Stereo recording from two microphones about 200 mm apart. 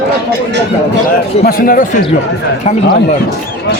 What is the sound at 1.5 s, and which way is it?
Speech, 45° left (ahead or behind).